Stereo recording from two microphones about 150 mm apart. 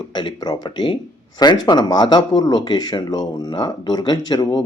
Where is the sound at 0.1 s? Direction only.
30° left (ahead or behind).